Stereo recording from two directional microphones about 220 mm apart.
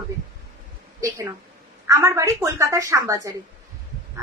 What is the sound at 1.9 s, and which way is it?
A woman's voice, 15° right (ahead or behind).